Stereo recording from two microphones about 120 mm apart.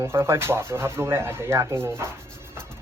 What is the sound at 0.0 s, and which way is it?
Speech, 20° right (ahead or behind).